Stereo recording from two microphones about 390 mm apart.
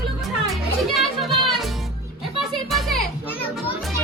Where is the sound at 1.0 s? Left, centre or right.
Centre.